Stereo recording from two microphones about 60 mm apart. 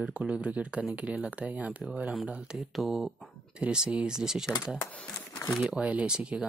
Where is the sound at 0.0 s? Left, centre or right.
Right.